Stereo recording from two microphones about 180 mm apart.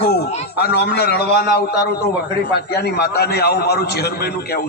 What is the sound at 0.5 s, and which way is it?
Speech, 65° left (ahead or behind).